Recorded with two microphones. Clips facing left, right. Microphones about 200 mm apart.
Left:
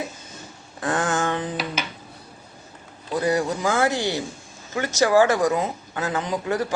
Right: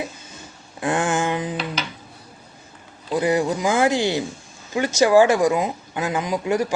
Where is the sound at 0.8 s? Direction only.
15° right (ahead or behind).